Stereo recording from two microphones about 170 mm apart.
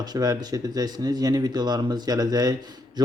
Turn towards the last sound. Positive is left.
turn(degrees=-25)  # may be behind; listen again after turning